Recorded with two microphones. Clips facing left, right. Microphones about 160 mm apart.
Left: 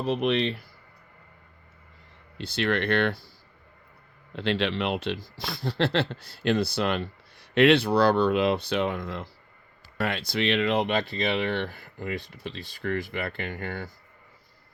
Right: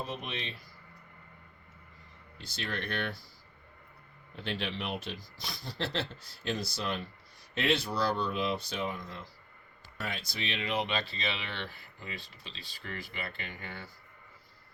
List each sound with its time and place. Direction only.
0.0 s speech: 70° left (ahead or behind)
2.4 s speech: 70° left (ahead or behind)
4.4 s speech: 85° left; by 13.9 s 55° left (ahead or behind)